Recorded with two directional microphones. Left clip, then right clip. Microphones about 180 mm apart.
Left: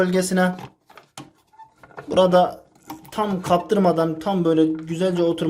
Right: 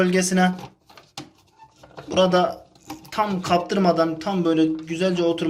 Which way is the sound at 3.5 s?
45° left (ahead or behind).